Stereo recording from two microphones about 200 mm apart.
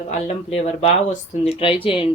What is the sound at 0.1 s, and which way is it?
Speech, 35° left (ahead or behind).